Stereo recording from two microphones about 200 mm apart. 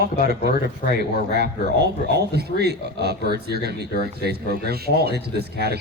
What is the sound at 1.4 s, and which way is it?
Speech, 55° right (ahead or behind).